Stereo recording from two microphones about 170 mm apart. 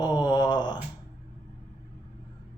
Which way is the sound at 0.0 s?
25° left (ahead or behind).